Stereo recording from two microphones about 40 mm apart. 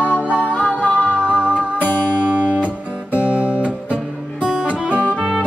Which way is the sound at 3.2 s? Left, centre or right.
Right.